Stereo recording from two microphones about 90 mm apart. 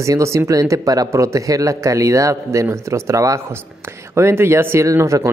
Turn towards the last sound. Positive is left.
turn(degrees=-35)  # may be behind; listen again after turning